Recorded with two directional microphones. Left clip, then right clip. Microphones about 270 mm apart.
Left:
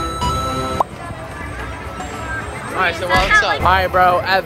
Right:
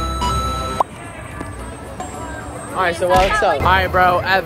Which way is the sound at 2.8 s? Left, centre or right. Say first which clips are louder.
Right 1 dB; right.